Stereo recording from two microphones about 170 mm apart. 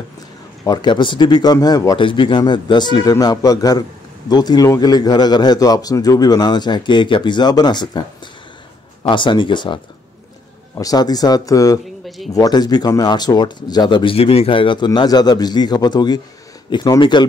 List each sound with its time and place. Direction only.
0.7 s speech: 25° left (ahead or behind)
9.0 s speech: 30° left (ahead or behind)